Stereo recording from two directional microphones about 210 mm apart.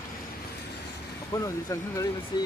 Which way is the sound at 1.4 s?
15° left (ahead or behind).